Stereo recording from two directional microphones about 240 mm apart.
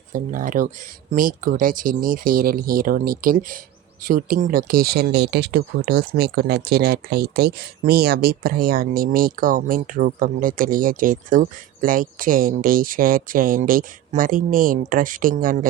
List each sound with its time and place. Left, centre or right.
0.1 s speech: right